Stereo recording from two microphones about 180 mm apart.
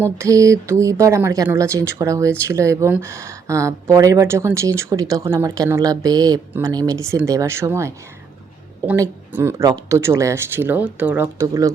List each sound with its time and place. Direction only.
0.0 s speech: 15° right (ahead or behind)